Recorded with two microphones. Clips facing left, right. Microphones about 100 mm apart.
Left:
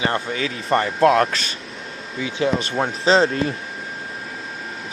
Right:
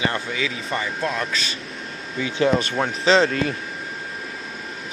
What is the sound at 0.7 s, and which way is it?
Speech, 60° left (ahead or behind).